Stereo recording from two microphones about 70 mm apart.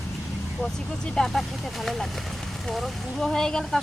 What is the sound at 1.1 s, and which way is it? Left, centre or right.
Speech, centre.